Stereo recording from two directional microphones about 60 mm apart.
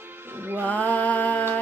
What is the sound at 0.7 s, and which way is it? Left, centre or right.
Music, left.